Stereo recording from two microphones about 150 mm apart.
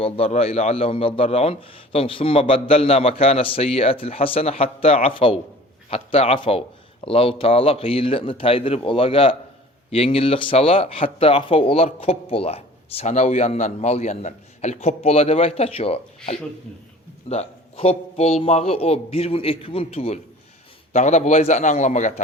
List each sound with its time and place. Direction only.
0.0 s a man's voice: 40° left (ahead or behind)